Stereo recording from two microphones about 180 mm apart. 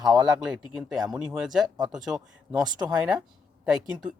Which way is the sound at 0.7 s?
Centre (ahead or behind).